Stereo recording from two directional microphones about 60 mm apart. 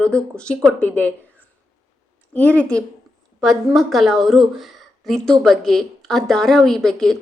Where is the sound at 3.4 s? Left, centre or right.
Centre.